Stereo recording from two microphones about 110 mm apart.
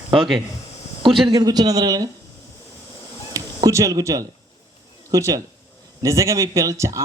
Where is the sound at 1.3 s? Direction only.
35° right (ahead or behind).